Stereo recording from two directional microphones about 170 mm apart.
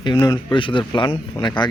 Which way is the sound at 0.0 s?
25° left (ahead or behind).